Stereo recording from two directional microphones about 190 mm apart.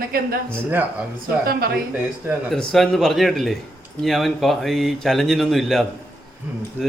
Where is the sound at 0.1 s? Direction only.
50° right (ahead or behind).